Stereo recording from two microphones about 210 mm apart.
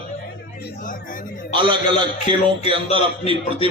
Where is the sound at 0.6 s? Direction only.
40° left (ahead or behind).